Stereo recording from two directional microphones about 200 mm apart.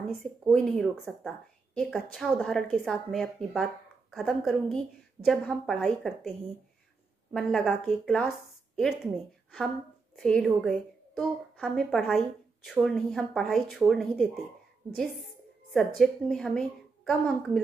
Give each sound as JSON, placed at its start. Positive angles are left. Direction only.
{"t": 0.1, "sound": "a woman's voice", "side_deg": 0}
{"t": 7.3, "sound": "a woman's voice", "side_deg": 0}
{"t": 10.1, "sound": "a woman's voice", "side_deg": 5}
{"t": 15.7, "sound": "a woman's voice", "side_deg": 0}